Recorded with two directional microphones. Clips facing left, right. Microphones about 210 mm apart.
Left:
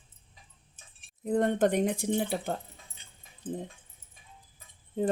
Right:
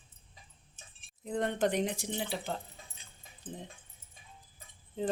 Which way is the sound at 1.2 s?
50° left (ahead or behind).